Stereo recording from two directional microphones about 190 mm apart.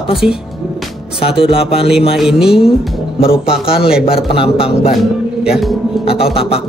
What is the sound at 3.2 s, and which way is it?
Speech, 30° left (ahead or behind).